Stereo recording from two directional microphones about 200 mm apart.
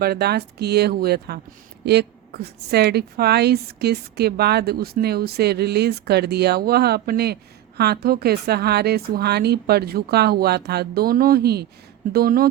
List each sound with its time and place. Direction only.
0.0 s a woman's voice: 50° right (ahead or behind)